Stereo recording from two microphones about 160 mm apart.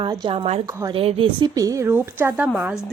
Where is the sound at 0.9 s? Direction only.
35° right (ahead or behind).